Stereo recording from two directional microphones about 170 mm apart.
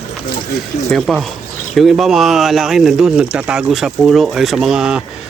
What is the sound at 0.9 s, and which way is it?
Speech, centre (ahead or behind).